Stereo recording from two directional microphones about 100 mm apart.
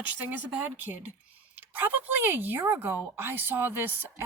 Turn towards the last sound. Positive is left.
turn(degrees=-20)  # may be behind; listen again after turning